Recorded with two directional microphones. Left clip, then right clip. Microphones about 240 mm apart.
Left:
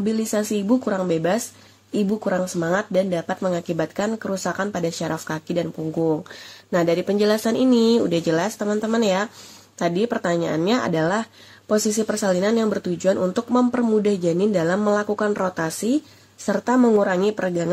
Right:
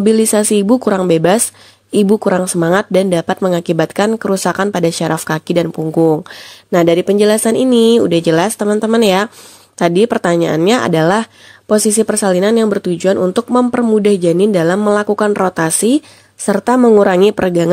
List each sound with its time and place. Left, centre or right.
0.0 s speech: right